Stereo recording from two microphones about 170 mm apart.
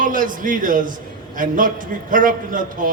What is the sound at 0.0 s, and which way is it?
A man's voice, 50° right (ahead or behind).